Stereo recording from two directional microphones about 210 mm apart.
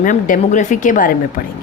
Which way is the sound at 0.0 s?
40° left (ahead or behind).